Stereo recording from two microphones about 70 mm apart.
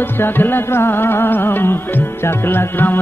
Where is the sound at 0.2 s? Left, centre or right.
Left.